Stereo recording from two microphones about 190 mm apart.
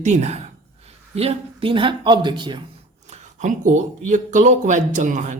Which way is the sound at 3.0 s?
40° right (ahead or behind).